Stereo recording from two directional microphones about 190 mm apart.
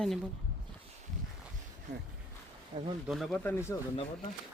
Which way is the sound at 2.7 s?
30° right (ahead or behind).